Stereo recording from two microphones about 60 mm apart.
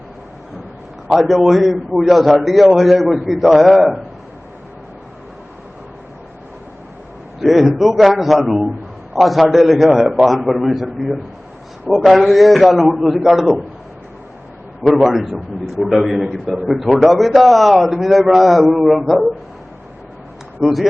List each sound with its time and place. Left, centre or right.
1.1 s a man's voice: centre
7.4 s a man's voice: centre
15.0 s a man's voice: centre
20.6 s speech: centre